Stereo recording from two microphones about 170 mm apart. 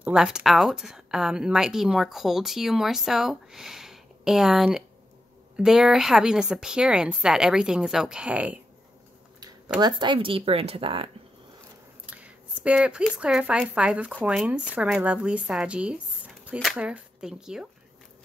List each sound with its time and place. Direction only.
0.0 s a woman's voice: 5° right (ahead or behind)
9.8 s speech: 25° right (ahead or behind)
12.1 s a woman's voice: 10° right (ahead or behind)